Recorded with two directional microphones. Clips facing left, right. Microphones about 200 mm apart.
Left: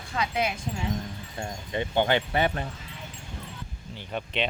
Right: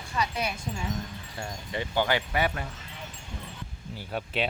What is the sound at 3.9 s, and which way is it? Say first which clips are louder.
Speech: even; 5° right (ahead or behind).